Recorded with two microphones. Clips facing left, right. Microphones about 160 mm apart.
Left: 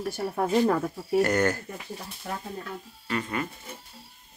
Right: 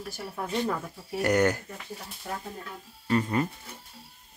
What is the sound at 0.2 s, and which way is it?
Speech, 50° left (ahead or behind).